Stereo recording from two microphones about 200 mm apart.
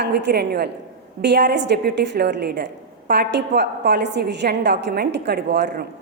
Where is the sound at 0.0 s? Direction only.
55° right (ahead or behind).